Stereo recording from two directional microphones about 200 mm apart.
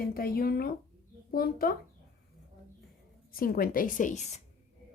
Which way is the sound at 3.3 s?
45° left (ahead or behind).